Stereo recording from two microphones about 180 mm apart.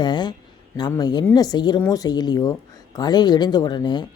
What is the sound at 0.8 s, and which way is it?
Speech, 20° left (ahead or behind).